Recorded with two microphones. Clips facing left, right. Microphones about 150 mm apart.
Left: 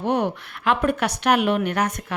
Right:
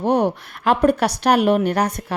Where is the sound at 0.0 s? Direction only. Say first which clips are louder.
Right 4 dB; 40° right (ahead or behind).